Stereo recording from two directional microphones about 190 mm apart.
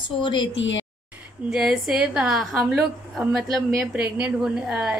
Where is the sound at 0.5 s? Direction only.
80° left.